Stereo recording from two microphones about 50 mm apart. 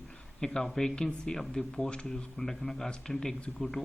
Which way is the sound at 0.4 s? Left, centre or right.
Centre.